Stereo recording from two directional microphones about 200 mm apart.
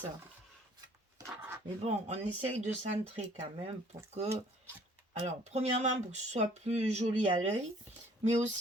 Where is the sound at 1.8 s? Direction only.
35° right (ahead or behind).